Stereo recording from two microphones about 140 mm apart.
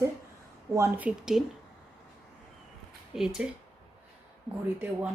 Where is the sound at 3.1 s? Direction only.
5° right (ahead or behind).